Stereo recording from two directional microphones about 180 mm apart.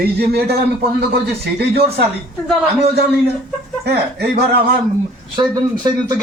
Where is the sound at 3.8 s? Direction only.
65° right (ahead or behind).